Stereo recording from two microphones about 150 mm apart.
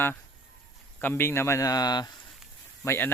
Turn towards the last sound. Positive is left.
turn(degrees=15)  # may be behind; listen again after turning